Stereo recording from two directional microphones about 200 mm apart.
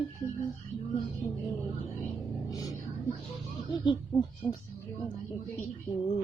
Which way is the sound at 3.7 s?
20° left (ahead or behind).